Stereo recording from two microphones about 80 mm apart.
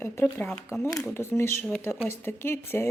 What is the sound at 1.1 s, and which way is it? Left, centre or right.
A woman's voice, left.